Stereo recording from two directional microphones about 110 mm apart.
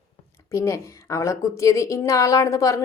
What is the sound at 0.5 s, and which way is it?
A woman's voice, 25° left (ahead or behind).